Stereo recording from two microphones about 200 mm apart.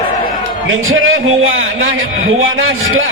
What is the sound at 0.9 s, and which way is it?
A man's voice, 90° right.